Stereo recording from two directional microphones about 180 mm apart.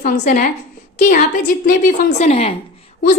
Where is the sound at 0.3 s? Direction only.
45° left (ahead or behind).